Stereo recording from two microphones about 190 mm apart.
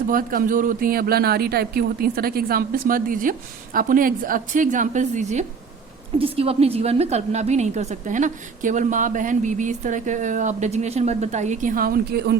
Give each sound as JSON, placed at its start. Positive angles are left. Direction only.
{"t": 0.1, "sound": "a woman's voice", "side_deg": -50}